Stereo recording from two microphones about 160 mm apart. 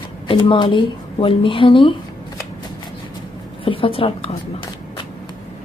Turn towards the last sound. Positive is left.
turn(degrees=35)  # may be behind; listen again after turning